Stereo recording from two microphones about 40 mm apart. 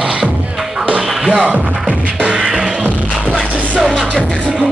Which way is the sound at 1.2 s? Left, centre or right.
Centre.